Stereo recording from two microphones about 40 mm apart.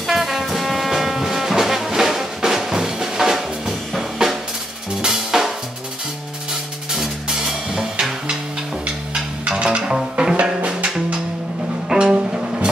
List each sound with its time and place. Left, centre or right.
0.1 s brass instrument: centre
5.0 s drum kit: centre
6.9 s music: centre
9.8 s music: right
11.9 s music: right